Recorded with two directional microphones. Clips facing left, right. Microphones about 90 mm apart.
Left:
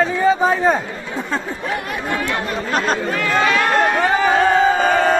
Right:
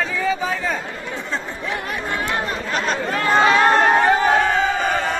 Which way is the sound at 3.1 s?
35° right (ahead or behind).